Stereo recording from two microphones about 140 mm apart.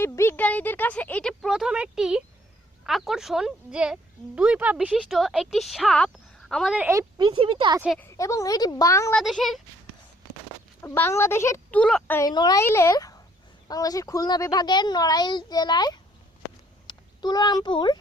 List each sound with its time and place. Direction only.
0.0 s speech: 15° left (ahead or behind)
6.7 s speech: 15° right (ahead or behind)
7.2 s speech: 35° right (ahead or behind)
7.9 s speech: 20° left (ahead or behind)
9.1 s speech: centre (ahead or behind)
10.8 s speech: 15° left (ahead or behind)
11.8 s speech: 5° left (ahead or behind)
12.3 s speech: 30° left (ahead or behind)
12.6 s speech: 20° left (ahead or behind)
16.8 s meow: 30° left (ahead or behind)